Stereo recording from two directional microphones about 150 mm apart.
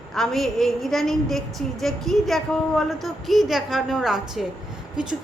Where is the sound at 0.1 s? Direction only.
Centre (ahead or behind).